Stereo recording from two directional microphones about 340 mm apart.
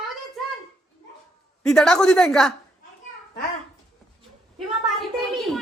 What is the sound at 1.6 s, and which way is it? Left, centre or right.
Speech, centre.